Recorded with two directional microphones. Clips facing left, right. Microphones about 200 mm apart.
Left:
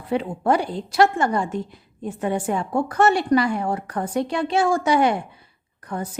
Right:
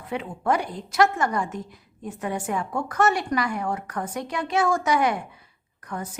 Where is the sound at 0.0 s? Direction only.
35° left (ahead or behind).